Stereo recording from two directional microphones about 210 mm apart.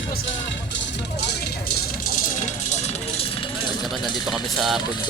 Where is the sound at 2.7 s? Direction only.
30° left (ahead or behind).